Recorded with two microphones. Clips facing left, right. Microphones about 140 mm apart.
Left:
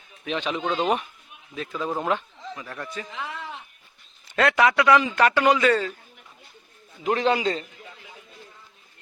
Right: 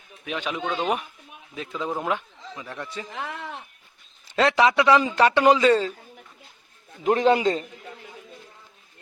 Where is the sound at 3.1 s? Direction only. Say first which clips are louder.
Right 1 dB; 60° right (ahead or behind).